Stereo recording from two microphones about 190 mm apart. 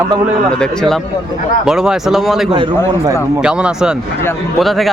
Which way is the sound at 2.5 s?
25° right (ahead or behind).